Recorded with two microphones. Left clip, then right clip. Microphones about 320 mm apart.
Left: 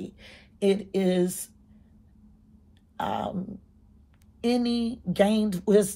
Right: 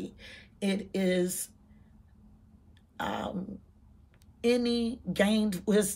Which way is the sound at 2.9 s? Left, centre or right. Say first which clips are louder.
Left 5 dB; centre.